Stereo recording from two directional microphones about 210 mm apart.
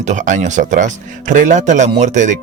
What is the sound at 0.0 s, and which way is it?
Speech, 35° right (ahead or behind).